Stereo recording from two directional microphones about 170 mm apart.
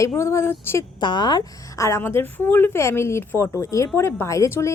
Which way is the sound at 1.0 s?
25° left (ahead or behind).